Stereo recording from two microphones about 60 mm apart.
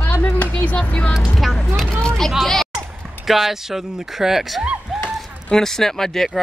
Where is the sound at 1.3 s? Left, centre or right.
Centre.